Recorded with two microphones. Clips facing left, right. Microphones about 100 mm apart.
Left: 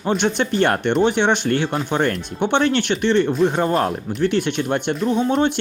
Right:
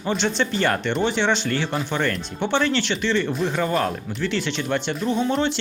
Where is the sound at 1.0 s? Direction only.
55° left (ahead or behind).